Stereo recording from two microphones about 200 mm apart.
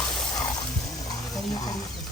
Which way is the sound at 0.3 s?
20° left (ahead or behind).